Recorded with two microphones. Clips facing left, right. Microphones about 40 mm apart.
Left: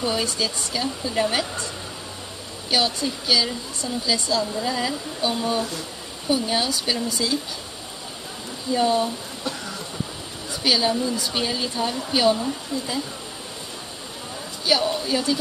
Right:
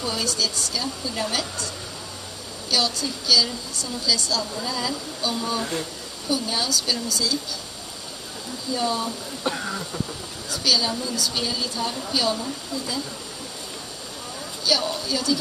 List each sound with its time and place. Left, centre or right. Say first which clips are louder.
0.0 s a woman's voice: left 2 dB; left
2.7 s a woman's voice: left 2 dB; left
8.7 s a woman's voice: left 5 dB; left
9.4 s a sound: right 6 dB; right
10.5 s a woman's voice: left 2 dB; left
14.6 s speech: left 2 dB; left